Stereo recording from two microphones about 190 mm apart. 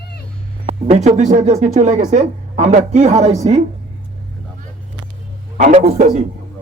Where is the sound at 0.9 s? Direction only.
35° right (ahead or behind).